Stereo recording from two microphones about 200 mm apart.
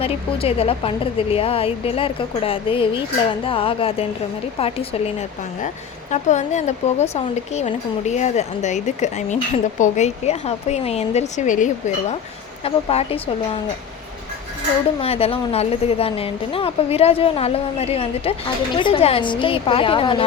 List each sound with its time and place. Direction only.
0.0 s a woman's voice: 30° left (ahead or behind)
15.0 s a woman's voice: 30° left (ahead or behind)